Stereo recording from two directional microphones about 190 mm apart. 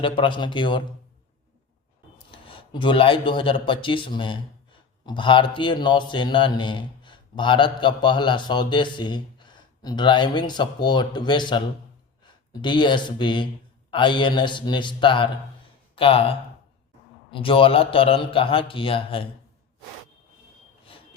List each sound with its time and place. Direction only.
0.0 s a man's voice: 25° left (ahead or behind)
2.3 s a man's voice: 25° left (ahead or behind)
20.8 s a sound: 30° left (ahead or behind)